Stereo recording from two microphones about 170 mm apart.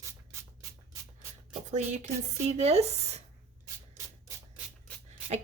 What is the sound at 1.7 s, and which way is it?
A woman's voice, 45° right (ahead or behind).